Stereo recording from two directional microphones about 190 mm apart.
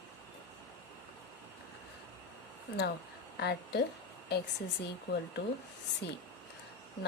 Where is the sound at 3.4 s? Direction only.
60° left (ahead or behind).